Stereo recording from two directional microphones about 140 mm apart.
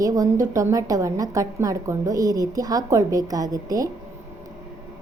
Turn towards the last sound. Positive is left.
turn(degrees=-25)  # may be behind; listen again after turning